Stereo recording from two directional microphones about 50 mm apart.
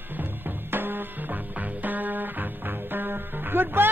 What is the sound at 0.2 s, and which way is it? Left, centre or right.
Music, right.